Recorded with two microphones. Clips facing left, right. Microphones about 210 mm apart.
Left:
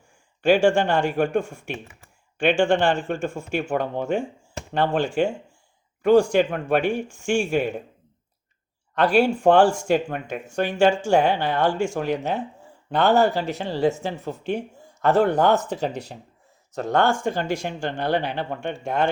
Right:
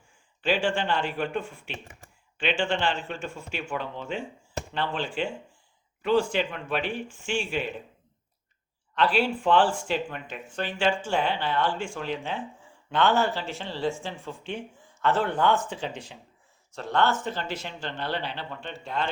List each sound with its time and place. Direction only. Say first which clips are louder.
0.4 s speech: left 8 dB; 45° left (ahead or behind)
9.0 s speech: left 6 dB; 45° left (ahead or behind)